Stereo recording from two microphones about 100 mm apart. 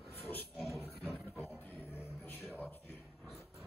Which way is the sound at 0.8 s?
20° left (ahead or behind).